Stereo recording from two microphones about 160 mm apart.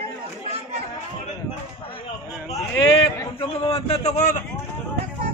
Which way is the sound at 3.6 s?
35° left (ahead or behind).